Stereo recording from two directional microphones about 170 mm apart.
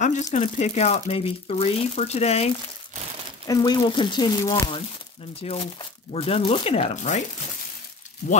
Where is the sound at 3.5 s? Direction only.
25° left (ahead or behind).